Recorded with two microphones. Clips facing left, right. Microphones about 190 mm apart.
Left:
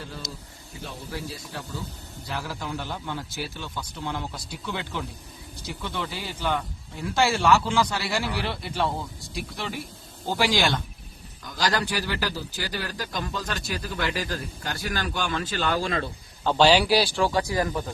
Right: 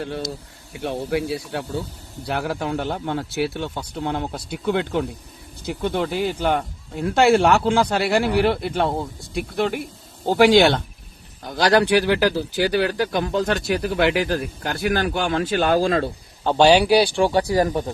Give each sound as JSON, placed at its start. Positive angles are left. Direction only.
{"t": 0.7, "sound": "a man's voice", "side_deg": -75}
{"t": 17.0, "sound": "speech", "side_deg": -25}